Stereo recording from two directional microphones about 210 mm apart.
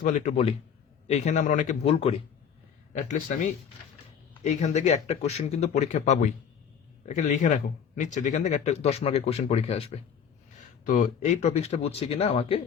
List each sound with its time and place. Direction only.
0.0 s speech: 35° left (ahead or behind)